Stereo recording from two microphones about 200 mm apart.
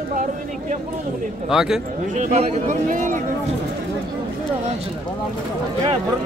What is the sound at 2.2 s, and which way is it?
A man's voice, 35° right (ahead or behind).